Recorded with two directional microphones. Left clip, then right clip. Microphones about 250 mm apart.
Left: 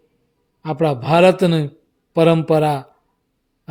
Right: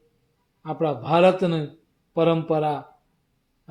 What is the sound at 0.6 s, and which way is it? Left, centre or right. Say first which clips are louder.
A man's voice: left 6 dB; left.